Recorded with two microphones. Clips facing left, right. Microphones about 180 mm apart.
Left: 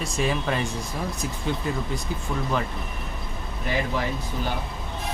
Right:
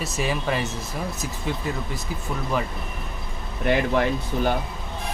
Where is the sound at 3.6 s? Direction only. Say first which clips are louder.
Right 6 dB; 60° right (ahead or behind).